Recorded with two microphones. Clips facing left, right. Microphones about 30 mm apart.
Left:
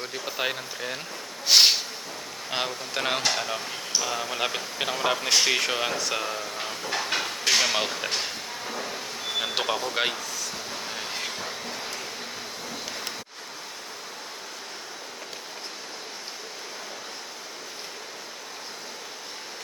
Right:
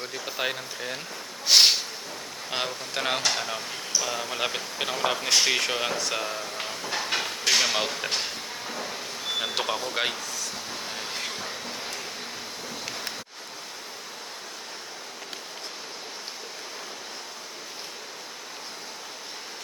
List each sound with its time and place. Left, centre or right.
0.0 s speech: centre
1.5 s a sound: centre
2.5 s a man's voice: centre
10.7 s vehicle: centre